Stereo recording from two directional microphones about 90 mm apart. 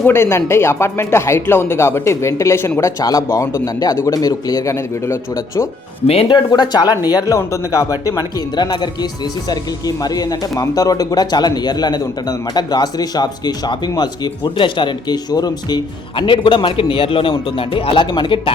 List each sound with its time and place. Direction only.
0.1 s speech: 30° left (ahead or behind)
3.0 s a man's voice: 40° left (ahead or behind)
6.1 s speech: 90° left
6.3 s a man's voice: 50° left (ahead or behind)
8.5 s speech: 55° left (ahead or behind)
16.1 s speech: 65° left (ahead or behind)